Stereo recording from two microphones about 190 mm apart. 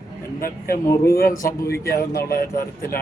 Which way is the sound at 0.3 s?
50° left (ahead or behind).